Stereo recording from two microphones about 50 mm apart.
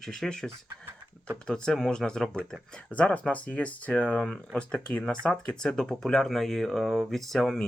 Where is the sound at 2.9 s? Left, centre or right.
Left; by 7.5 s centre.